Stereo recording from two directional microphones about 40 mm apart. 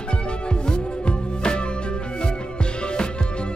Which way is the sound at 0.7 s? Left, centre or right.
Left.